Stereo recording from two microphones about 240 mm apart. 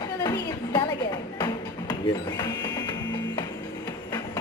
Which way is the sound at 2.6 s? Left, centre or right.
Centre.